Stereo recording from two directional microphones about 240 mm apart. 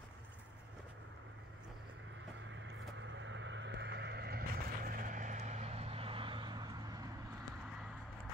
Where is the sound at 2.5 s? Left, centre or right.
Right; by 7.0 s centre.